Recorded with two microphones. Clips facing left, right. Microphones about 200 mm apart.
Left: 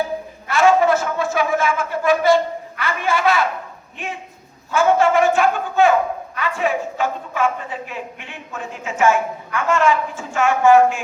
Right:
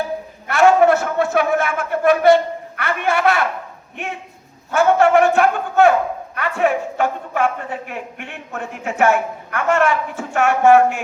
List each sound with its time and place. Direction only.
0.4 s a man's voice: 60° right (ahead or behind)
4.7 s a woman's voice: 65° right (ahead or behind)